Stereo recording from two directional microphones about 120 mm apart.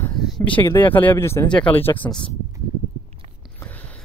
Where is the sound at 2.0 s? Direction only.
40° left (ahead or behind).